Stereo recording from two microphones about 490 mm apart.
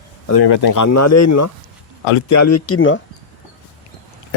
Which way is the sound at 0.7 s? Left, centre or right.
Left.